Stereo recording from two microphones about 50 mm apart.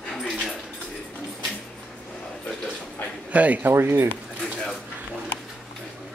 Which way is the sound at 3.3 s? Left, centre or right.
Right.